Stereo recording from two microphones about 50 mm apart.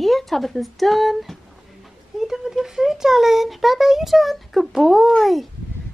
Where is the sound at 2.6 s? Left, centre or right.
Centre.